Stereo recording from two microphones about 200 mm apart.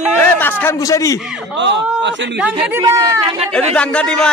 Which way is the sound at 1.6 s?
65° right (ahead or behind).